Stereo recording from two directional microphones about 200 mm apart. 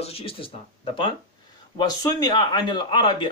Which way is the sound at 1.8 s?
20° left (ahead or behind).